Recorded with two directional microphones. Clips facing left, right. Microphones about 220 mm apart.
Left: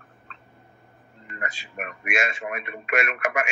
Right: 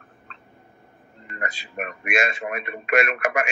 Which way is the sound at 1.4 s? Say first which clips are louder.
Right 3 dB; 35° right (ahead or behind).